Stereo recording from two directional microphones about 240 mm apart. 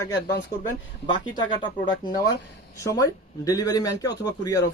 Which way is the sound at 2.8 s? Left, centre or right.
Centre.